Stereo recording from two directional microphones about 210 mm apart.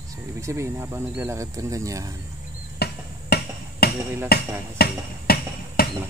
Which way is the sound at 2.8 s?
50° left (ahead or behind).